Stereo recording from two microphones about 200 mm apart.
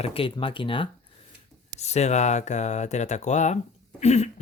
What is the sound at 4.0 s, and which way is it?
Cough, 35° left (ahead or behind).